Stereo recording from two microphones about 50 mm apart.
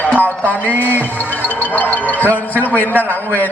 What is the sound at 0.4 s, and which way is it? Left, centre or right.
A man's voice, left.